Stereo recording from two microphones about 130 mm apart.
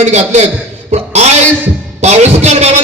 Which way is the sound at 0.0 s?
60° right (ahead or behind).